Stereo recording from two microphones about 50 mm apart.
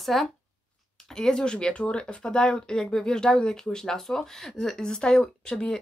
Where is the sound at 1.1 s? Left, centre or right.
Centre.